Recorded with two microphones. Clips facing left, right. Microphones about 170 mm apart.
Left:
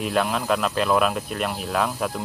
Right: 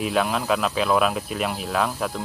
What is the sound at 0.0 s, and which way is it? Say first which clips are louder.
Speech: even; centre (ahead or behind).